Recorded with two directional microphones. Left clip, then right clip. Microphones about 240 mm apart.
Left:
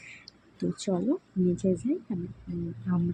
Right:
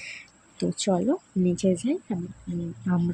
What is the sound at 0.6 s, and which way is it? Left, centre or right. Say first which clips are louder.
Speech: right 5 dB; right.